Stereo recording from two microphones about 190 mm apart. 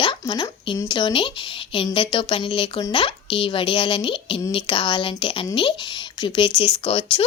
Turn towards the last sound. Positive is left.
turn(degrees=30)  # may be behind; listen again after turning